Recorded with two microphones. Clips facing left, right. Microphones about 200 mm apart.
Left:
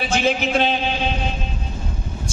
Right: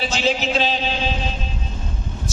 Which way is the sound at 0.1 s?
55° left (ahead or behind).